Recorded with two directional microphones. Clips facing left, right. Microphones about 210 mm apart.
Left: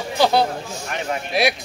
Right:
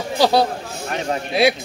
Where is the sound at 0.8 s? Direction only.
35° right (ahead or behind).